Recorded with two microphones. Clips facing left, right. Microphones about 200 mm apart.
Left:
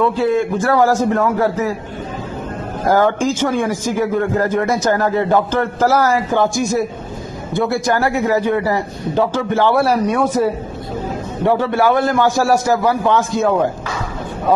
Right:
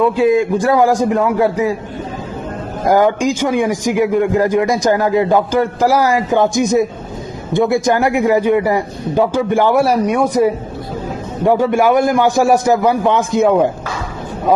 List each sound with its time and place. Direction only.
0.0 s a man's voice: 15° right (ahead or behind)
2.8 s a man's voice: 15° right (ahead or behind)